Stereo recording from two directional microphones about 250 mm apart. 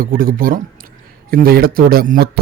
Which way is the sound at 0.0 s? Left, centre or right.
Right.